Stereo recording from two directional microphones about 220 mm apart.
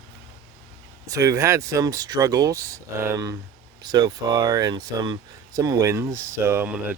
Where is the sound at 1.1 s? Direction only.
15° right (ahead or behind).